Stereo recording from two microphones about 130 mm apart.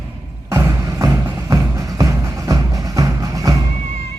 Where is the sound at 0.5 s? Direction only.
25° right (ahead or behind).